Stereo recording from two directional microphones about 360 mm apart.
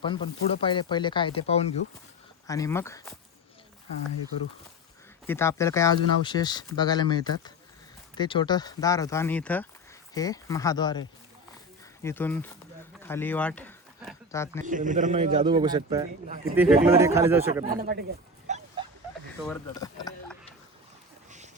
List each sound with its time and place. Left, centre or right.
0.0 s speech: centre
5.2 s speech: centre
12.0 s speech: centre
14.6 s a man's voice: right
17.7 s speech: right
18.4 s dog: centre
19.5 s speech: centre
21.2 s a sound: centre